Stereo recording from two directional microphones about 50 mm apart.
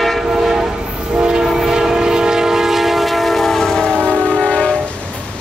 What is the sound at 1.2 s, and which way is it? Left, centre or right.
Train, centre.